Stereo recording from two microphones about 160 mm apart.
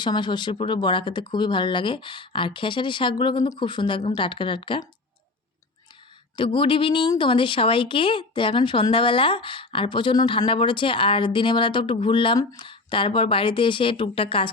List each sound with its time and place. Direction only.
0.0 s a woman's voice: 30° left (ahead or behind)
6.3 s a woman's voice: 30° left (ahead or behind)